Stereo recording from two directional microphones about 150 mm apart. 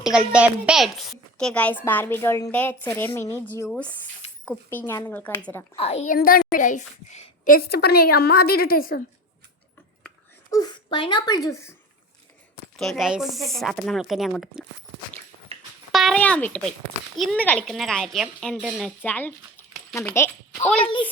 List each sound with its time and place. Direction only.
0.0 s a woman's voice: 5° right (ahead or behind); by 5.6 s 15° left (ahead or behind)
5.7 s a woman's voice: 40° left (ahead or behind)
6.1 s a woman's voice: 70° left (ahead or behind)
6.5 s a child's voice: 60° left (ahead or behind)
7.5 s a woman's voice: 90° left; by 9.0 s 70° left (ahead or behind)
10.5 s speech: 25° left (ahead or behind)
12.7 s speech: centre (ahead or behind)
15.5 s music: 40° right (ahead or behind)
15.9 s a sound: centre (ahead or behind)
16.2 s a woman's voice: 10° left (ahead or behind)